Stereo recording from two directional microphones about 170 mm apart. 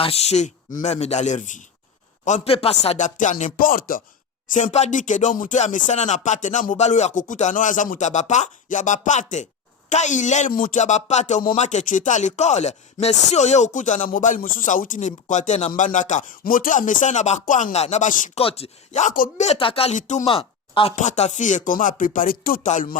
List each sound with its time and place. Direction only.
0.0 s speech: 35° left (ahead or behind)
18.3 s speech: 35° left (ahead or behind); by 19.5 s 50° left (ahead or behind)
19.5 s speech: 35° left (ahead or behind)
20.0 s speech: 45° left (ahead or behind)
20.3 s a sound: 30° left (ahead or behind)
20.9 s speech: 45° left (ahead or behind)